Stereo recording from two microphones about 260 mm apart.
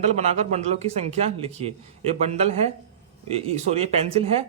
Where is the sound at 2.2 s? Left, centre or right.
Right.